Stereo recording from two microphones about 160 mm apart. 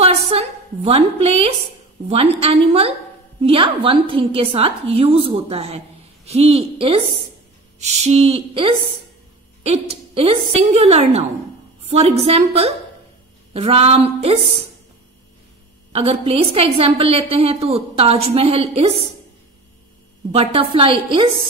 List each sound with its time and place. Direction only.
0.3 s a woman's voice: 40° right (ahead or behind)
15.9 s a woman's voice: 40° right (ahead or behind)
20.3 s a woman's voice: 35° right (ahead or behind)